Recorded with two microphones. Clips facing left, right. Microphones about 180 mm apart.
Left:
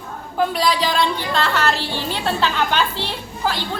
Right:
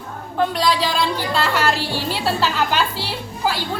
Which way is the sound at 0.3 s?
Centre (ahead or behind).